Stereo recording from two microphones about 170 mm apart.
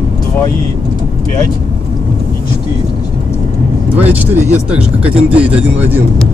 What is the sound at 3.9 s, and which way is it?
Speech, 10° right (ahead or behind).